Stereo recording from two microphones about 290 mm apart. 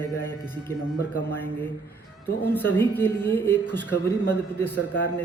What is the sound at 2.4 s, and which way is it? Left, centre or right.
Speech, centre.